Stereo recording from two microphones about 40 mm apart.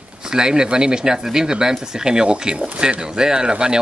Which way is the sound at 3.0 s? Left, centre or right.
Centre.